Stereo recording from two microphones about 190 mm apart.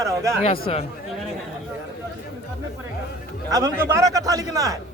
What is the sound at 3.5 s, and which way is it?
A man's voice, 20° right (ahead or behind).